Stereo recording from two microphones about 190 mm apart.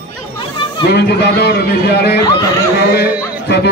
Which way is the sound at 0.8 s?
60° left (ahead or behind).